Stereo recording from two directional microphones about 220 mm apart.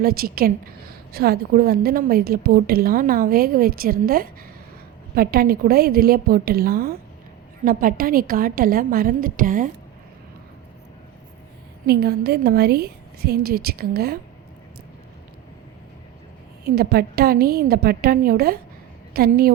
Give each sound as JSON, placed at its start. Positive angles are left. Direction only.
{"t": 0.0, "sound": "a woman's voice", "side_deg": -45}
{"t": 11.9, "sound": "a woman's voice", "side_deg": -45}
{"t": 16.6, "sound": "a woman's voice", "side_deg": -45}